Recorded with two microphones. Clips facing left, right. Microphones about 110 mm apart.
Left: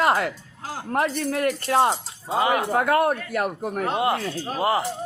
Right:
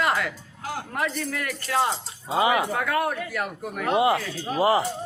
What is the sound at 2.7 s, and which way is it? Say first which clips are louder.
Speech: left 5 dB; 40° left (ahead or behind).